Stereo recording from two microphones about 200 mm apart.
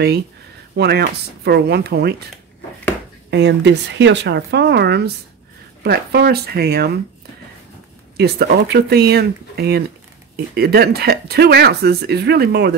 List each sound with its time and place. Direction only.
0.7 s speech: 55° right (ahead or behind)
3.3 s speech: 60° right (ahead or behind)
8.2 s speech: 55° right (ahead or behind)